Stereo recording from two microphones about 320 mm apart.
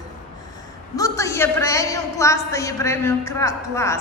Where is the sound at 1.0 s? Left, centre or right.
Centre.